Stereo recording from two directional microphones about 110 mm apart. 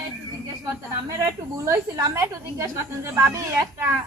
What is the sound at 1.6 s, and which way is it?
A child's voice, 30° right (ahead or behind).